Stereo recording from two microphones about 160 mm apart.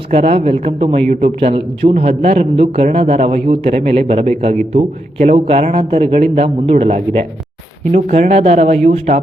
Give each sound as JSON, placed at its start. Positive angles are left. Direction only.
{"t": 0.1, "sound": "speech", "side_deg": -40}